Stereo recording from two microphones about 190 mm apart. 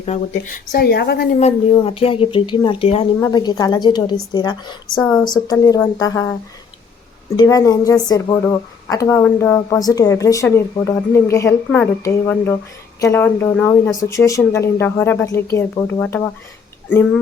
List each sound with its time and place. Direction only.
0.0 s speech: 40° left (ahead or behind); by 1.4 s 55° left (ahead or behind)
1.4 s speech: 30° left (ahead or behind)
3.2 s speech: 20° left (ahead or behind)
4.9 s speech: 5° left (ahead or behind)
5.2 s speech: 20° left (ahead or behind)
7.3 s speech: 20° left (ahead or behind)